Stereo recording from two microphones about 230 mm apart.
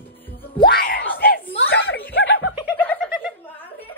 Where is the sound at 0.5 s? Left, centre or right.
Left.